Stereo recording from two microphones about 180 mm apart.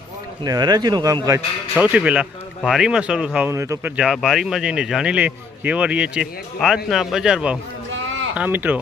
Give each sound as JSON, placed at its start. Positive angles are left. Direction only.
{"t": 0.4, "sound": "speech", "side_deg": -20}
{"t": 1.8, "sound": "speech", "side_deg": -10}
{"t": 7.9, "sound": "a sound", "side_deg": -90}
{"t": 8.4, "sound": "speech", "side_deg": -10}